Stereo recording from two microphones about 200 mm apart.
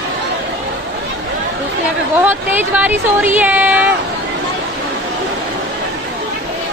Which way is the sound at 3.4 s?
10° right (ahead or behind).